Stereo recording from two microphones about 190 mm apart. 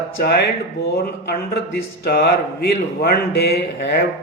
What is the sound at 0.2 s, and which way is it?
Speech, 55° left (ahead or behind).